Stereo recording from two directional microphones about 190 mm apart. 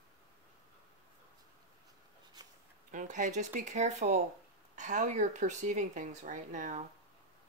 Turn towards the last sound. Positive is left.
turn(degrees=-40)  # may be behind; listen again after turning